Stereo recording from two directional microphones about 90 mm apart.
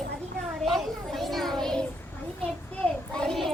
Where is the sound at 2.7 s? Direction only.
10° left (ahead or behind).